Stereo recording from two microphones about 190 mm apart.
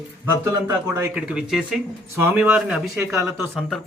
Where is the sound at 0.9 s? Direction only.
10° right (ahead or behind).